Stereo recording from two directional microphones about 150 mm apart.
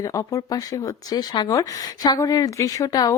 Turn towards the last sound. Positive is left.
turn(degrees=25)  # may be behind; listen again after turning